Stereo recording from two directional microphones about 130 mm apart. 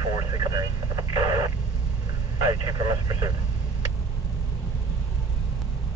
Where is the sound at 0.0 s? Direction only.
30° right (ahead or behind).